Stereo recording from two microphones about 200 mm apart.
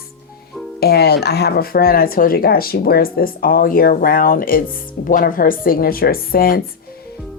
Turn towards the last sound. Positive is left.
turn(degrees=50)  # may be behind; listen again after turning